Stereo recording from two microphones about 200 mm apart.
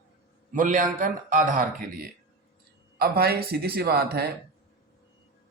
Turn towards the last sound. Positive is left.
turn(degrees=-50)  # may be behind; listen again after turning